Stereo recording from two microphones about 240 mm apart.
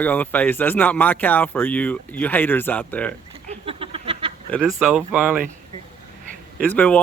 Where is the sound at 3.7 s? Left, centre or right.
Right.